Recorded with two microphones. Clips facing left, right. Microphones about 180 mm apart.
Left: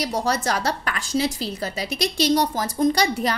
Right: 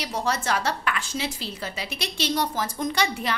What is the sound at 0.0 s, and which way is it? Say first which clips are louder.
A woman's voice: left 4 dB; 40° left (ahead or behind).